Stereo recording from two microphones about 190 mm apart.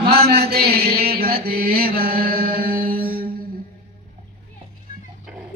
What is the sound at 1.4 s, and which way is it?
Mantra, 55° right (ahead or behind).